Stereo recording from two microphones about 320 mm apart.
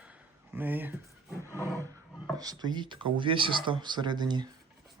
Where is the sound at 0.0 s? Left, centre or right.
Centre.